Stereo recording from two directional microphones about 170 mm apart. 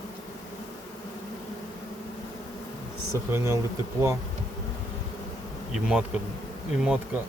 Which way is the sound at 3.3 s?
15° right (ahead or behind).